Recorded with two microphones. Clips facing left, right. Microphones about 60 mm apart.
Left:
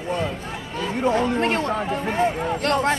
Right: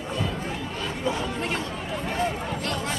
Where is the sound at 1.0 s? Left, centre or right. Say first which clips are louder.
Left 9 dB; left.